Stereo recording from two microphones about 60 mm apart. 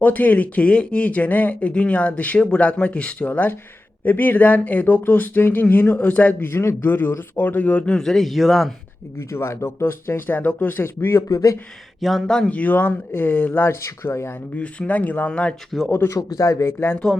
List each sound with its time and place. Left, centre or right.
0.0 s speech: left
6.4 s a man's voice: left
7.9 s a man's voice: centre
9.3 s speech: left
11.3 s speech: left
11.9 s speech: centre
12.5 s a man's voice: left
13.8 s speech: left
14.5 s speech: left
15.3 s speech: centre
16.0 s a man's voice: left